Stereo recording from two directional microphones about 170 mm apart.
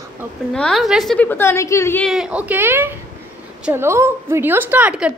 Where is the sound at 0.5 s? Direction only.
5° left (ahead or behind).